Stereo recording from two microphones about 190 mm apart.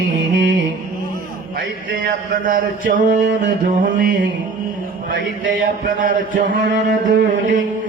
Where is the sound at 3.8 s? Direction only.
45° right (ahead or behind).